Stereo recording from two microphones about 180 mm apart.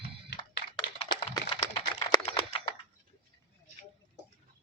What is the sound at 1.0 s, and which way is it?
Computer keyboard, 30° left (ahead or behind).